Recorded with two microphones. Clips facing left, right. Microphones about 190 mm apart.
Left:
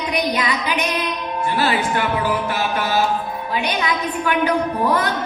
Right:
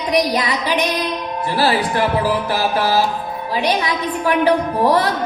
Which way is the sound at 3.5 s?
35° right (ahead or behind).